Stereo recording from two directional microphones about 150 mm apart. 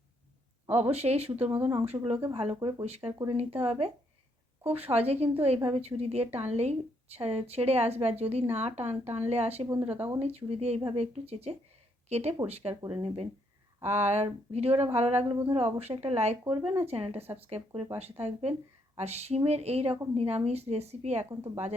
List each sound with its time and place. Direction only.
0.7 s a woman's voice: 45° right (ahead or behind)
1.5 s speech: 15° right (ahead or behind)
2.3 s speech: 40° right (ahead or behind)
2.6 s speech: 30° right (ahead or behind)
2.8 s a woman's voice: 45° right (ahead or behind)
9.6 s speech: 15° right (ahead or behind)
10.2 s a woman's voice: 40° right (ahead or behind)
13.8 s a woman's voice: 50° right (ahead or behind)
21.2 s speech: 20° right (ahead or behind)